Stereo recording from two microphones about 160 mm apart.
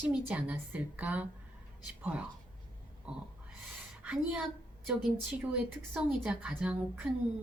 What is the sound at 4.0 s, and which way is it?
A woman's voice, 10° right (ahead or behind).